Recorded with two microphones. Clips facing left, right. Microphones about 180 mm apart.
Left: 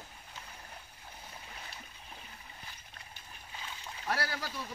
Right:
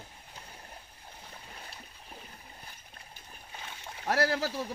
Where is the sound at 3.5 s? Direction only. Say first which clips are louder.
Right 1 dB; 50° right (ahead or behind).